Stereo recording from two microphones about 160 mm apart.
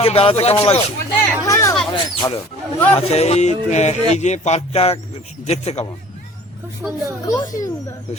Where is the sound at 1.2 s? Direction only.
20° left (ahead or behind).